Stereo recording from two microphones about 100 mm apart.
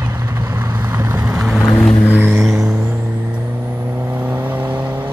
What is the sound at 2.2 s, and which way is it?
Vehicle, 20° right (ahead or behind).